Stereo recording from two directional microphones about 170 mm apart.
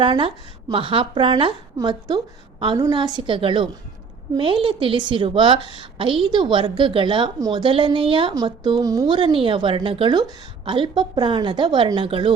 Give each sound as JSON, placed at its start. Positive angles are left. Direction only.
{"t": 0.0, "sound": "a woman's voice", "side_deg": -30}